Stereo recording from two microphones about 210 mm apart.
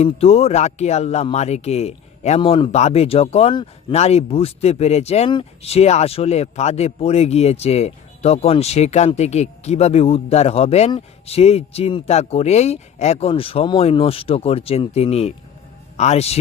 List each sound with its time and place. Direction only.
0.0 s a man's voice: 30° left (ahead or behind)